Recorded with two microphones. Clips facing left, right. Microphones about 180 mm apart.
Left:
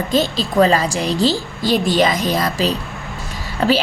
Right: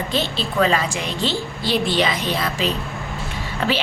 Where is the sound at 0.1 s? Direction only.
40° left (ahead or behind).